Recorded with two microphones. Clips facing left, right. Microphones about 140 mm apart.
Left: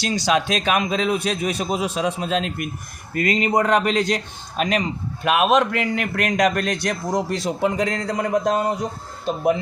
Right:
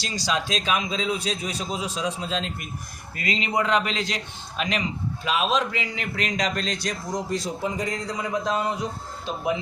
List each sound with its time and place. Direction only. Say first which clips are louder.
0.0 s a man's voice: left 7 dB; 55° left (ahead or behind)
3.2 s a man's voice: left 6 dB; 50° left (ahead or behind)
5.2 s a man's voice: left 7 dB; 60° left (ahead or behind)